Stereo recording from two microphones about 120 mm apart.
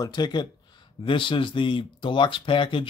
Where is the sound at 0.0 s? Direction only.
35° left (ahead or behind).